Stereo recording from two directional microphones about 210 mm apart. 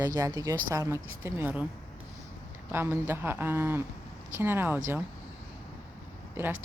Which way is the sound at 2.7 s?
10° right (ahead or behind).